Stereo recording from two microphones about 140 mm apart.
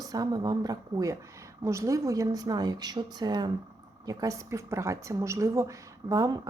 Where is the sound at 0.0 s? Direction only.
25° right (ahead or behind).